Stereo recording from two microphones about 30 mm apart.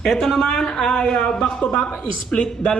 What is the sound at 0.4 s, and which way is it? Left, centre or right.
A man's voice, left.